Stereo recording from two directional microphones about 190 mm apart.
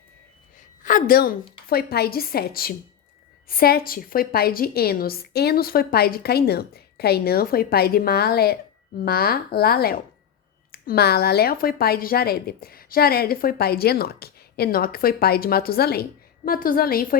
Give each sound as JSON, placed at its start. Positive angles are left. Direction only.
{"t": 0.8, "sound": "a woman's voice", "side_deg": 45}